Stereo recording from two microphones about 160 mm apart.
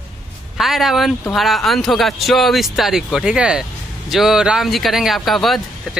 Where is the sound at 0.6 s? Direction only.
Centre (ahead or behind).